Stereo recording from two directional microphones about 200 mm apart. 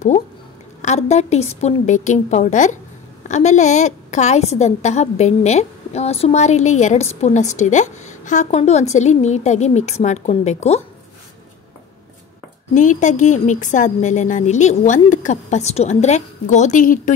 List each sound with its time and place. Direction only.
0.8 s a woman's voice: 35° left (ahead or behind)
12.7 s a woman's voice: 40° left (ahead or behind)